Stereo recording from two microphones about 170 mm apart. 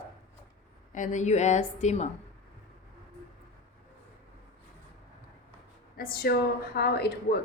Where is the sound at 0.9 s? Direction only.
45° left (ahead or behind).